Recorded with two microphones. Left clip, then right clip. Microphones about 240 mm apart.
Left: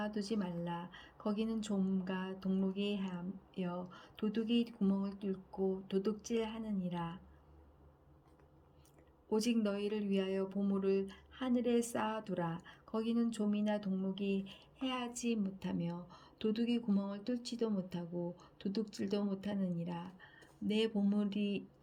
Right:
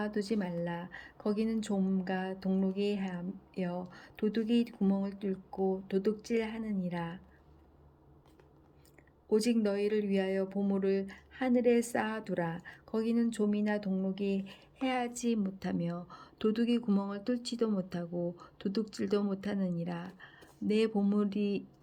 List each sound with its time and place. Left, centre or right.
0.0 s speech: centre
0.5 s speech: left
0.9 s speech: centre
9.3 s speech: centre